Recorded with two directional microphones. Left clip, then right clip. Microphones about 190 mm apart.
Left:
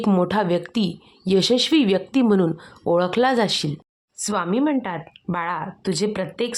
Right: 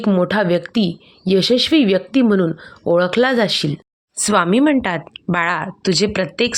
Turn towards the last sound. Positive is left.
turn(degrees=-15)  # may be behind; listen again after turning